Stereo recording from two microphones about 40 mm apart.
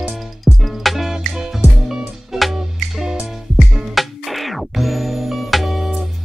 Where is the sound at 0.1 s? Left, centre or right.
Centre.